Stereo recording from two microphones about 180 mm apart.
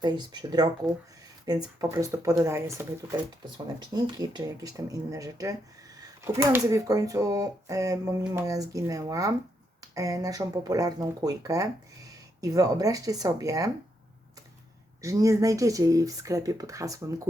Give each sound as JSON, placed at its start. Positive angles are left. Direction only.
{"t": 0.0, "sound": "speech", "side_deg": -25}
{"t": 15.0, "sound": "speech", "side_deg": -20}